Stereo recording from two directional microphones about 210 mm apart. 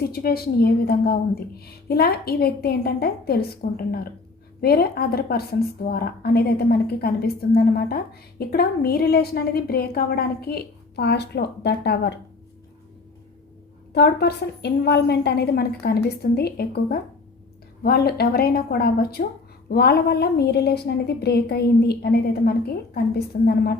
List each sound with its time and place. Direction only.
0.1 s a woman's voice: 45° left (ahead or behind)
13.9 s a woman's voice: 50° left (ahead or behind)